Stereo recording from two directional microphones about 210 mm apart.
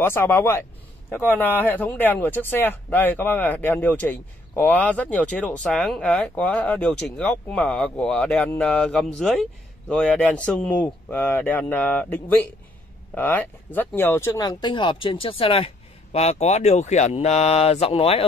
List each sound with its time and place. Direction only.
0.0 s speech: 10° left (ahead or behind); by 18.2 s 30° left (ahead or behind)